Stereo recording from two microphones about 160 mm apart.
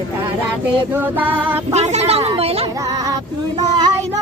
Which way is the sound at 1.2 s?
10° right (ahead or behind).